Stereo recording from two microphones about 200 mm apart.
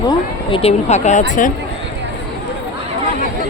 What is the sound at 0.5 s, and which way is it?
Speech, 30° left (ahead or behind).